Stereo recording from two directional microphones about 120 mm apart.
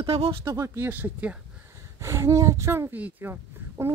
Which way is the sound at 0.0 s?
50° right (ahead or behind).